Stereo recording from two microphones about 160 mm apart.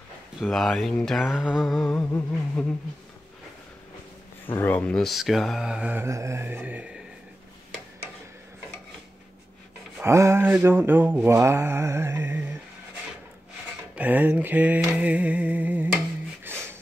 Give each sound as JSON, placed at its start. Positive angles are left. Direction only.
{"t": 0.4, "sound": "speech", "side_deg": 0}
{"t": 2.0, "sound": "humming", "side_deg": 15}
{"t": 4.6, "sound": "speech", "side_deg": 10}
{"t": 10.0, "sound": "mantra", "side_deg": -15}
{"t": 13.9, "sound": "mantra", "side_deg": -10}
{"t": 16.5, "sound": "music", "side_deg": -15}